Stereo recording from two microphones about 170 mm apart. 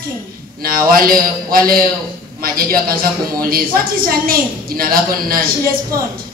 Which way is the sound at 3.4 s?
60° right (ahead or behind).